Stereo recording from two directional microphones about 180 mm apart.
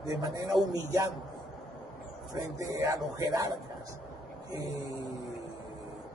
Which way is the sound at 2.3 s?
15° right (ahead or behind).